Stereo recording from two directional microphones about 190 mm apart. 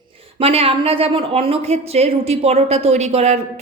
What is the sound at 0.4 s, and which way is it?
Speech, 30° right (ahead or behind).